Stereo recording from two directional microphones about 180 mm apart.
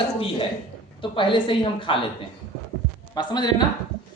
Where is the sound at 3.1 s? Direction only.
25° left (ahead or behind).